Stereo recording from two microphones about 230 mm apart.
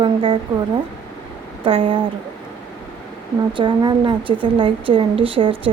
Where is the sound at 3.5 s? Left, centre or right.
Centre.